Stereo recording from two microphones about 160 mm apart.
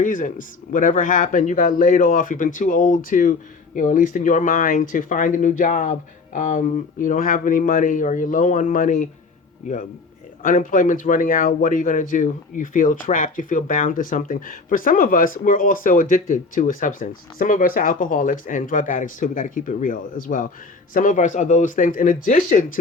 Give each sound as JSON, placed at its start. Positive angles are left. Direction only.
{"t": 0.0, "sound": "a man's voice", "side_deg": 55}